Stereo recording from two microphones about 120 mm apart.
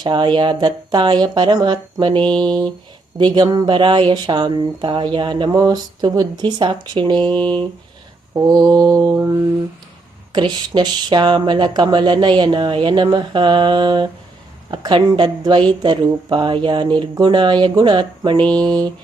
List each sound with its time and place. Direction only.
0.0 s speech: 40° right (ahead or behind)
18.3 s a sound: 10° left (ahead or behind)
18.6 s speech: 35° right (ahead or behind)